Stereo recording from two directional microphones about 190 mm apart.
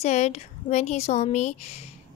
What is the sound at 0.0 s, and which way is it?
A woman's voice, 35° left (ahead or behind).